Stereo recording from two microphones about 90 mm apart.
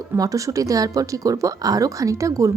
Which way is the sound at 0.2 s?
40° right (ahead or behind).